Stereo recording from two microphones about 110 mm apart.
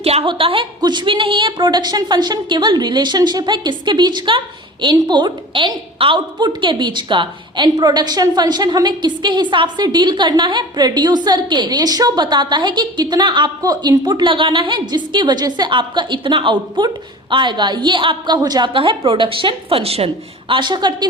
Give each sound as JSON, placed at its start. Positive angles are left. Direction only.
{"t": 0.0, "sound": "a woman's voice", "side_deg": -65}
{"t": 0.3, "sound": "a woman's voice", "side_deg": -55}
{"t": 0.8, "sound": "a woman's voice", "side_deg": -40}
{"t": 13.6, "sound": "a woman's voice", "side_deg": -30}
{"t": 18.7, "sound": "a woman's voice", "side_deg": -50}
{"t": 20.5, "sound": "a woman's voice", "side_deg": -45}